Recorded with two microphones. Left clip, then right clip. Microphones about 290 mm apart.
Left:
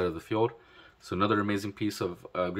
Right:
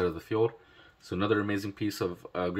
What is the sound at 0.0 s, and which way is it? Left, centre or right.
Speech, centre.